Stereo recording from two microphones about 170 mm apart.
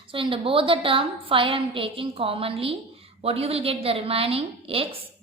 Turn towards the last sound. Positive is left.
turn(degrees=-35)  # may be behind; listen again after turning